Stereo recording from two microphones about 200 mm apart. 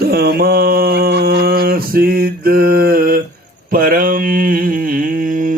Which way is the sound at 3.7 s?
45° right (ahead or behind).